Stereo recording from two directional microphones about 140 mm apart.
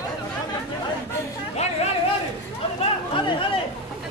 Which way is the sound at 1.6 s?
50° left (ahead or behind).